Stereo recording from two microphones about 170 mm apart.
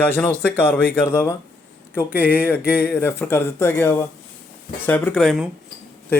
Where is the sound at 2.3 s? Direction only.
10° left (ahead or behind).